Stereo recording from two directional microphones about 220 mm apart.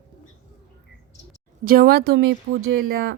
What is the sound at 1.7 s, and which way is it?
Speech, 45° right (ahead or behind).